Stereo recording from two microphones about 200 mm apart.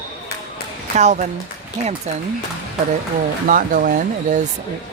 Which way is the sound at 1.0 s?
35° right (ahead or behind).